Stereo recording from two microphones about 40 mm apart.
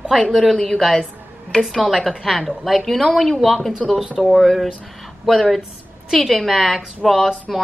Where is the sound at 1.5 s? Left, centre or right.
Left.